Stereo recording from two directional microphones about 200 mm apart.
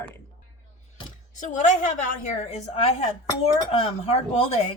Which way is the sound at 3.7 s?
30° left (ahead or behind).